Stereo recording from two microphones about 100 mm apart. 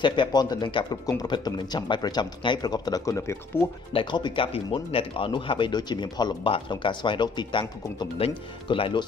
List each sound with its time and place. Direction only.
0.0 s speech: 50° left (ahead or behind); by 3.6 s 30° left (ahead or behind)
3.9 s speech: 50° left (ahead or behind)
8.2 s speech: 60° left (ahead or behind)